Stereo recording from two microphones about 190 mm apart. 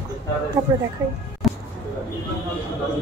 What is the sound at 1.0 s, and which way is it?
Speech, 15° right (ahead or behind).